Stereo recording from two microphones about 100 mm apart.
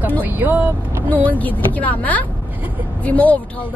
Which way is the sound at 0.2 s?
20° right (ahead or behind).